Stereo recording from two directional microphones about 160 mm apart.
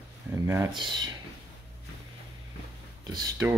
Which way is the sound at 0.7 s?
30° right (ahead or behind).